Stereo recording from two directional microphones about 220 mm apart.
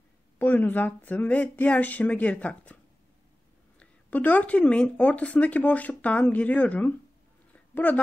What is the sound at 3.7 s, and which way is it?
Speech, 5° left (ahead or behind).